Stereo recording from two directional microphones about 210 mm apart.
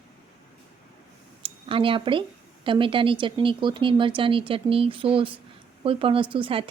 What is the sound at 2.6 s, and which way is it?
A woman's voice, 25° right (ahead or behind).